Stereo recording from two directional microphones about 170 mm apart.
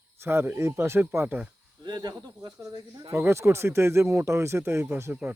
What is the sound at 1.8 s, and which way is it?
Speech, 25° right (ahead or behind).